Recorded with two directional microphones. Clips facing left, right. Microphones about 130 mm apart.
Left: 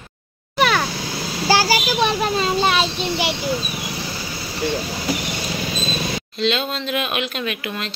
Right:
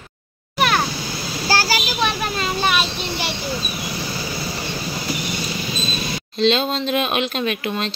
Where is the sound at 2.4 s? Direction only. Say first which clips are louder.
Even; 25° left (ahead or behind).